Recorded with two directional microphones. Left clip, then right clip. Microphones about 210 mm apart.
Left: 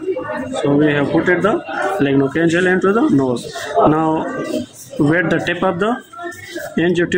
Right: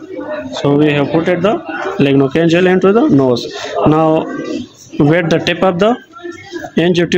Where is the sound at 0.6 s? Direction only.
45° right (ahead or behind).